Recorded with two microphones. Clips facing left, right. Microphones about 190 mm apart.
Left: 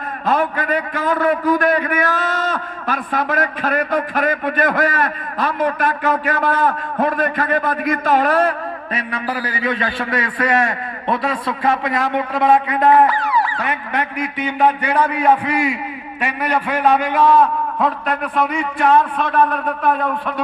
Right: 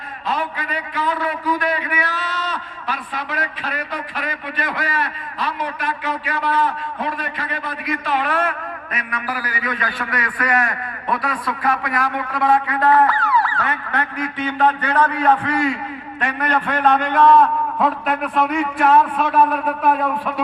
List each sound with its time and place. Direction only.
0.3 s a man's voice: 50° left (ahead or behind); by 20.3 s 5° right (ahead or behind)